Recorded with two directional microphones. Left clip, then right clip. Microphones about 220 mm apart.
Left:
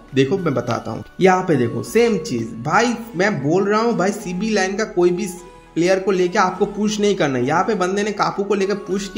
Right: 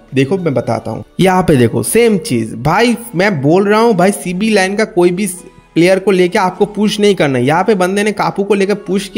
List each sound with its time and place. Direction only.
0.1 s speech: 25° right (ahead or behind)
1.1 s speech: 45° right (ahead or behind)